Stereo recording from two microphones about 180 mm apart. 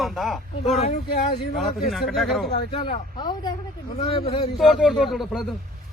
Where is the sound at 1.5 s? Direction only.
Centre (ahead or behind).